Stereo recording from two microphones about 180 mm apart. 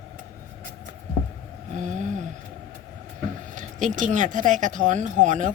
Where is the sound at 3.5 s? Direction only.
45° right (ahead or behind).